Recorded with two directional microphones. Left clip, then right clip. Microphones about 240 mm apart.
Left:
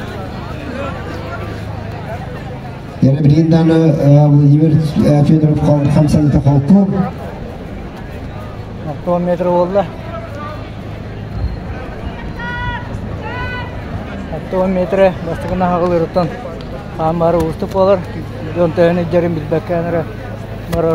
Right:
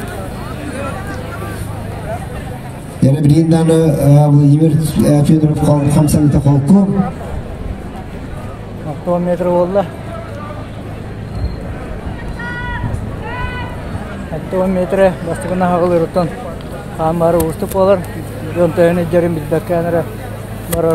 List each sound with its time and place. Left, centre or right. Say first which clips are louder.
3.0 s a man's voice: right 1 dB; right
9.1 s speech: even; centre
14.5 s speech: even; centre
20.7 s a man's voice: even; right